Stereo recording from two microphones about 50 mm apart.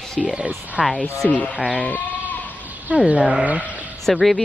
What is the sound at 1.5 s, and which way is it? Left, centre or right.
Speech, centre.